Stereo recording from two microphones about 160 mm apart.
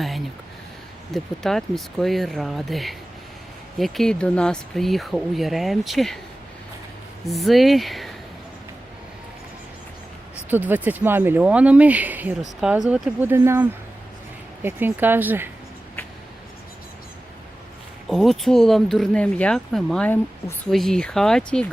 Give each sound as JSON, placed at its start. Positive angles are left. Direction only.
{"t": 1.1, "sound": "speech", "side_deg": 0}
{"t": 7.3, "sound": "speech", "side_deg": 0}
{"t": 10.5, "sound": "speech", "side_deg": -10}
{"t": 18.1, "sound": "speech", "side_deg": 0}